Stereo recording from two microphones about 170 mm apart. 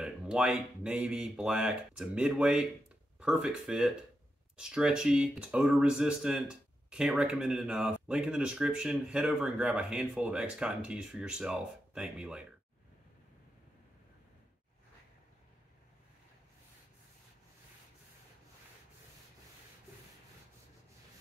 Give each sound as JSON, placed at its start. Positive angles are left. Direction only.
{"t": 0.0, "sound": "speech", "side_deg": -5}